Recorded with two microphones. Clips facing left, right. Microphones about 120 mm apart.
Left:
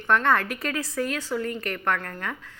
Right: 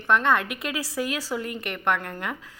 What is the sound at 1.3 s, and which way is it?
Speech, 15° right (ahead or behind).